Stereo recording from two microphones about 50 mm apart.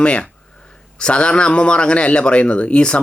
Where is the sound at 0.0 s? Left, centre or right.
Left.